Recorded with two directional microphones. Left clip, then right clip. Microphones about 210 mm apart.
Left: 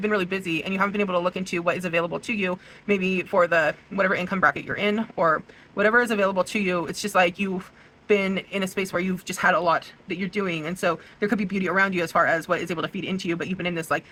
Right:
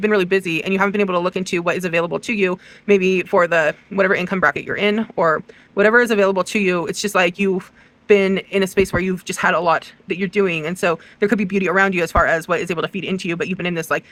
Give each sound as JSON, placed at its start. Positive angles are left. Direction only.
{"t": 0.0, "sound": "speech", "side_deg": -55}